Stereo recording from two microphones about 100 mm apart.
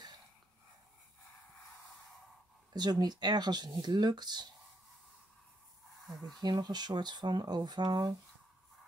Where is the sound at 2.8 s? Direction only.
40° right (ahead or behind).